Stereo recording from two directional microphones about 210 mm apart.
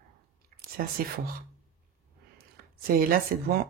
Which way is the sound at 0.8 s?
40° right (ahead or behind).